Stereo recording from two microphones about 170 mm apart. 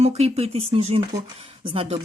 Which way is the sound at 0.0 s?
40° right (ahead or behind).